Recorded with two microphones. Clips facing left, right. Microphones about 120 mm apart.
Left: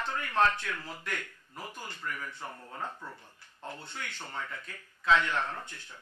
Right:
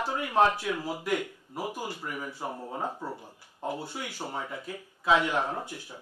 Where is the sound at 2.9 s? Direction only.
35° right (ahead or behind).